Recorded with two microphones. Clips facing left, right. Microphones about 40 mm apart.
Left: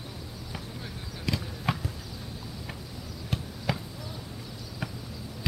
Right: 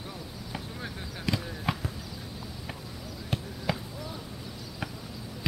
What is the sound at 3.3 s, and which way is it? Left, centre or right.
Basketball bounce, centre.